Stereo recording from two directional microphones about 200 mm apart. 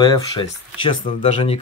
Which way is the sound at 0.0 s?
20° left (ahead or behind).